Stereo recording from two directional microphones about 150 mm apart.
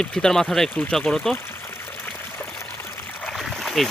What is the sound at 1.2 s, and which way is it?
Trickle, 15° left (ahead or behind).